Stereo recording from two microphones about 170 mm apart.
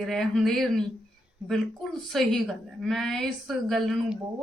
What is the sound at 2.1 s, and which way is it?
A woman's voice, centre (ahead or behind).